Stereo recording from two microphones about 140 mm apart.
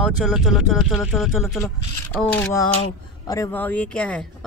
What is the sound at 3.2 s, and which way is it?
Speech, 25° left (ahead or behind).